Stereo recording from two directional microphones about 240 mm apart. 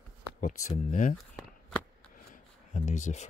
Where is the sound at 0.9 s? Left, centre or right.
Left.